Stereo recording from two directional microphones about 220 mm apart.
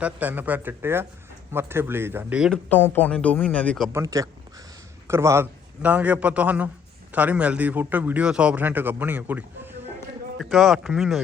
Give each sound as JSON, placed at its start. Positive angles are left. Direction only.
{"t": 0.0, "sound": "a man's voice", "side_deg": -5}
{"t": 3.9, "sound": "a man's voice", "side_deg": -15}